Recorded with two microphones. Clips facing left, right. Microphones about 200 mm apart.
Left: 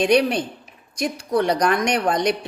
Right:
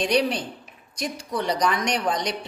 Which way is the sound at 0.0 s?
55° left (ahead or behind).